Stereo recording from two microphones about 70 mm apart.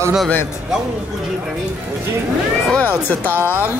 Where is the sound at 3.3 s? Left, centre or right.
Right.